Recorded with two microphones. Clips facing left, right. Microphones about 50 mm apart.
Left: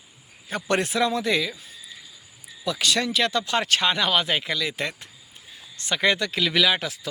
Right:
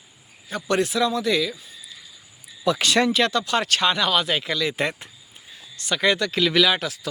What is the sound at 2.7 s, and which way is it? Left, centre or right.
Speech, right.